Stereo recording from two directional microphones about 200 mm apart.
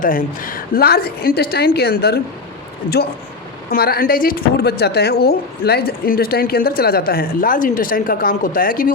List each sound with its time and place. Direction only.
0.0 s speech: 40° left (ahead or behind)
3.7 s speech: 50° left (ahead or behind)